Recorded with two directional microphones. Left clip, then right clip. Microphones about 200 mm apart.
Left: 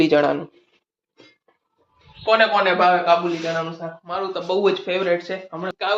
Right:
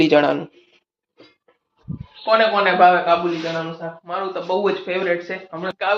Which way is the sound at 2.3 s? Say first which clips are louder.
Right 1 dB; 10° left (ahead or behind).